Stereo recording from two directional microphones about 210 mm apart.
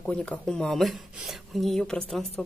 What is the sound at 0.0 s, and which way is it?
Speech, 5° left (ahead or behind).